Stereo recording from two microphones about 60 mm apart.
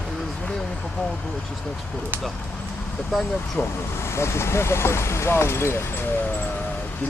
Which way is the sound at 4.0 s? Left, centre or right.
Left.